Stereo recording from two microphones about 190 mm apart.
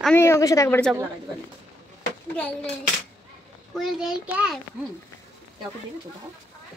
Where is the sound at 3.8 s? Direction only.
Centre (ahead or behind).